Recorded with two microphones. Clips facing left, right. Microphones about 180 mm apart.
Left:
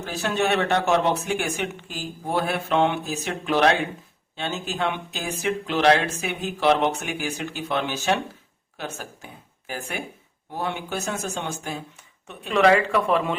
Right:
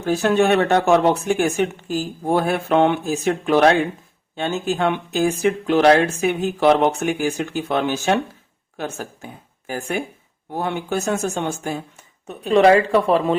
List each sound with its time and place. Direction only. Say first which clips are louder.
0.0 s speech: right 8 dB; 50° right (ahead or behind)
9.6 s speech: right 7 dB; 45° right (ahead or behind)